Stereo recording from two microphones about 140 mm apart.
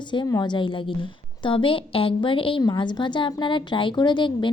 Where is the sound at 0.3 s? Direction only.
30° left (ahead or behind).